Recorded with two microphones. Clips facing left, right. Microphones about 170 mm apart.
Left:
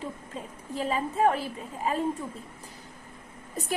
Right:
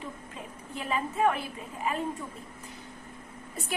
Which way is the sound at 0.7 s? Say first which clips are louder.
Left 3 dB; 35° left (ahead or behind).